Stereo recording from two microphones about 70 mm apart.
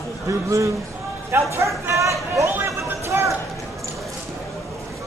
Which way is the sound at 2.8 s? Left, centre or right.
Right.